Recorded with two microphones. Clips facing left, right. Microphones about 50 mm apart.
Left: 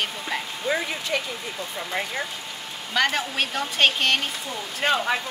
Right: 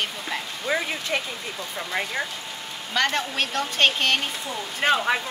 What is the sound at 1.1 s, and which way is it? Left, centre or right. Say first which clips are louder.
Speech: even; right.